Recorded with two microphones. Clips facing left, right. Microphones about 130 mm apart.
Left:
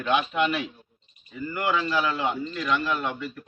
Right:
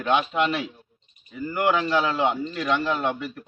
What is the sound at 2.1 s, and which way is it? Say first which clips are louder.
A man's voice: right 3 dB; 30° right (ahead or behind).